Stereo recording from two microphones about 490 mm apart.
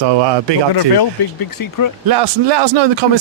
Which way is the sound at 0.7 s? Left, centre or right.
Left.